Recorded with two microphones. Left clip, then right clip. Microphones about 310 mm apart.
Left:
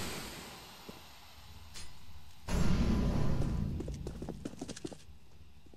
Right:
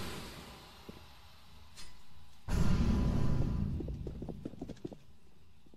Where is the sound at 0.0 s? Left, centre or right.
Centre.